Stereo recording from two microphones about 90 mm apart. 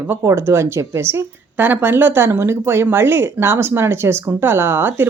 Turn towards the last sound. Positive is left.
turn(degrees=-25)  # may be behind; listen again after turning